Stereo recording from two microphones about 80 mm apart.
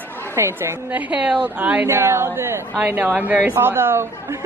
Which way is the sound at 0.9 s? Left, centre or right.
Centre.